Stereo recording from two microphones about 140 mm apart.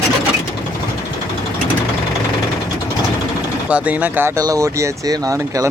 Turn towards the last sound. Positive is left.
turn(degrees=-25)  # may be behind; listen again after turning